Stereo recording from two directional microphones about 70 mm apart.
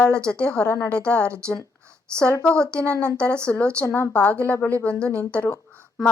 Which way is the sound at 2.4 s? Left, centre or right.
Centre.